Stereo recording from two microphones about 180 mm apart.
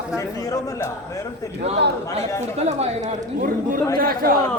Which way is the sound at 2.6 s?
40° right (ahead or behind).